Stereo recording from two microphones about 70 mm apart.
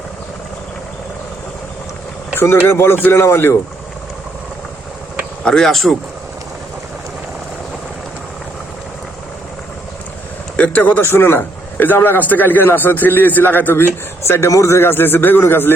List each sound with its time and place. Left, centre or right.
2.3 s a man's voice: left
5.5 s speech: centre
10.6 s a man's voice: left